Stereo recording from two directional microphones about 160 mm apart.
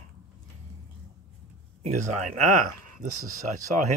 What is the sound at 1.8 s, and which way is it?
Speech, 45° right (ahead or behind).